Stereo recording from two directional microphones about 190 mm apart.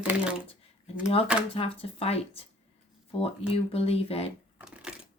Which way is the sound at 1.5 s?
30° left (ahead or behind).